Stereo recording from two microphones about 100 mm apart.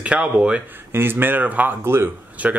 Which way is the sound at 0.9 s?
20° right (ahead or behind).